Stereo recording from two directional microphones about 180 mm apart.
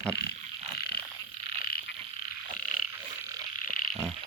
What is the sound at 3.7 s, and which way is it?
Frog, 50° left (ahead or behind).